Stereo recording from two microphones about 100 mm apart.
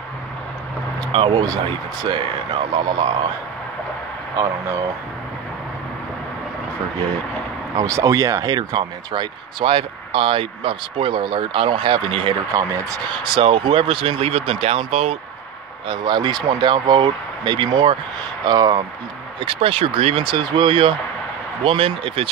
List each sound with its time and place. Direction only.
1.3 s speech: 40° right (ahead or behind)
2.7 s speech: 45° right (ahead or behind)
7.7 s speech: 35° right (ahead or behind)
9.7 s speech: 65° right (ahead or behind)
12.5 s speech: 35° right (ahead or behind)
13.2 s speech: 55° right (ahead or behind); by 15.1 s 80° right
15.9 s speech: 45° right (ahead or behind)
18.4 s speech: 40° right (ahead or behind)
19.4 s speech: 65° right (ahead or behind)